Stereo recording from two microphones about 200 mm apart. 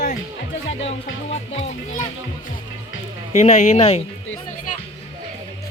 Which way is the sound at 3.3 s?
35° left (ahead or behind).